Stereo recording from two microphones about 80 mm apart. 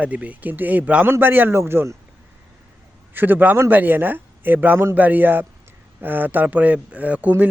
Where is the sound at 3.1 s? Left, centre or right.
Right.